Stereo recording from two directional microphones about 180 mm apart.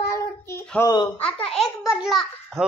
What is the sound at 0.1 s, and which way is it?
Child singing, 15° left (ahead or behind).